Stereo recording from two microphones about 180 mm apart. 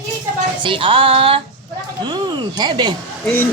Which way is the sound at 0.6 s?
30° right (ahead or behind).